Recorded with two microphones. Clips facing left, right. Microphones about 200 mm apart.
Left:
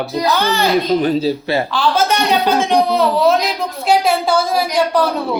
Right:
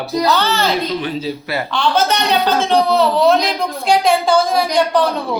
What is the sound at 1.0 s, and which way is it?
Speech, 35° left (ahead or behind).